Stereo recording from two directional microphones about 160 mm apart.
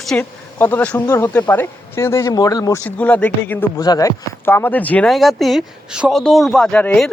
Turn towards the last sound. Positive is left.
turn(degrees=10)  # may be behind; listen again after turning